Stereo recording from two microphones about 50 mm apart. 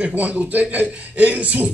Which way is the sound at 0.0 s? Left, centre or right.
Right.